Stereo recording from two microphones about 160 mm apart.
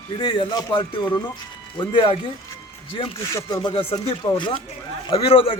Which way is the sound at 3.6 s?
35° left (ahead or behind).